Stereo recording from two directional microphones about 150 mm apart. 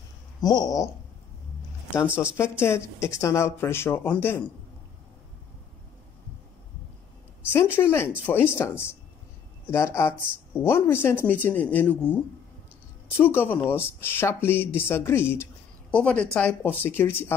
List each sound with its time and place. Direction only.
0.4 s a sound: 25° left (ahead or behind)
2.3 s a woman's voice: 15° left (ahead or behind)
7.5 s a woman's voice: 15° left (ahead or behind)
13.2 s a woman's voice: 15° left (ahead or behind)